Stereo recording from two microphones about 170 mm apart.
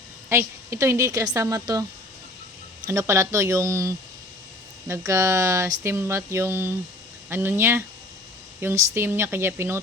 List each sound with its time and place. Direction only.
0.3 s speech: 15° right (ahead or behind)
2.8 s speech: 15° right (ahead or behind)